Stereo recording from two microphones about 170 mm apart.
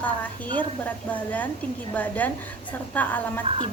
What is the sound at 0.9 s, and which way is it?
A woman's voice, 10° left (ahead or behind).